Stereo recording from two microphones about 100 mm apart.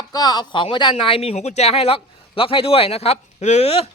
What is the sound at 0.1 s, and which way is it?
Speech, 40° left (ahead or behind).